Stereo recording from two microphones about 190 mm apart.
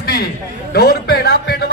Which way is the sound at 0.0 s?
55° left (ahead or behind).